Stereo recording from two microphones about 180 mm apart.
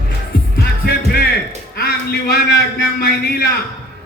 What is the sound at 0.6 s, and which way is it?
Music, 60° left (ahead or behind).